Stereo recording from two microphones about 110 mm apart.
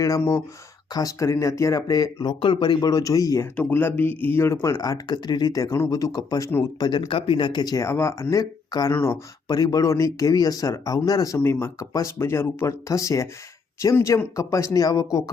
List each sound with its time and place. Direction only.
0.9 s speech: 30° left (ahead or behind)
2.4 s speech: 45° left (ahead or behind)
3.5 s speech: 15° left (ahead or behind)
4.6 s speech: 30° left (ahead or behind)
7.1 s speech: 50° left (ahead or behind)
7.9 s speech: 25° left (ahead or behind)
8.9 s speech: 20° left (ahead or behind)
9.5 s speech: 35° left (ahead or behind)
11.3 s speech: 20° left (ahead or behind)